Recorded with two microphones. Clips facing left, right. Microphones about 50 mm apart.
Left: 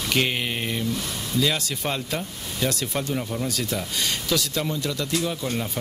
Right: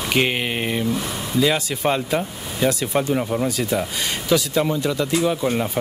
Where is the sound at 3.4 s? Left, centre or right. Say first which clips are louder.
Right 6 dB; centre.